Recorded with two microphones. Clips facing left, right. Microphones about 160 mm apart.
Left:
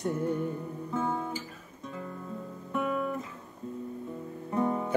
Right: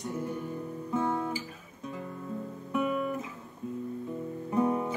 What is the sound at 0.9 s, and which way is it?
Guitar, centre (ahead or behind).